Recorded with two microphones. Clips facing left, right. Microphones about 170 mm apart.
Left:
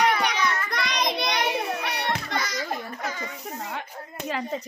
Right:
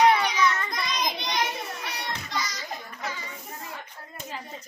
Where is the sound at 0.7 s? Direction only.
70° left (ahead or behind).